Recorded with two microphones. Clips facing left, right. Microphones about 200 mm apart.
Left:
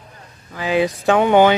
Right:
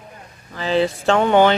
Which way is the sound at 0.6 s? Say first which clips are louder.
Even; 10° left (ahead or behind).